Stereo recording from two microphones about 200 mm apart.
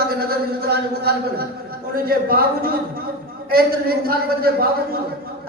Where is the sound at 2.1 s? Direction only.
50° right (ahead or behind).